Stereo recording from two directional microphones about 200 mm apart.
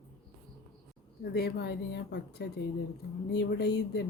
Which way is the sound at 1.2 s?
55° left (ahead or behind).